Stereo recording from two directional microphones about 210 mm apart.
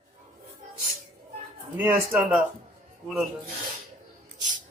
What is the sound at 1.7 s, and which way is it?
Speech, 10° right (ahead or behind).